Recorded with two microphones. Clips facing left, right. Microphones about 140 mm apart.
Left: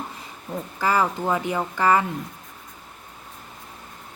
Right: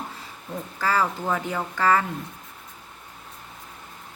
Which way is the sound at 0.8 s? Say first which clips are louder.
Left 2 dB; 15° left (ahead or behind).